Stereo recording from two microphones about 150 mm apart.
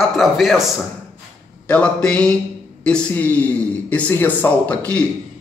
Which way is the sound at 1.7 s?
10° left (ahead or behind).